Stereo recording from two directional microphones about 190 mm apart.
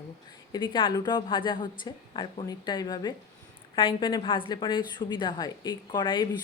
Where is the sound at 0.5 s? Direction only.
25° left (ahead or behind).